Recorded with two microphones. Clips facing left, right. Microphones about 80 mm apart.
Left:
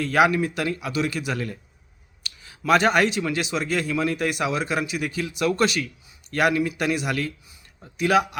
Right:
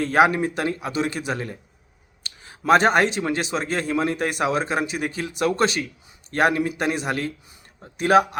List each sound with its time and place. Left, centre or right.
0.0 s speech: right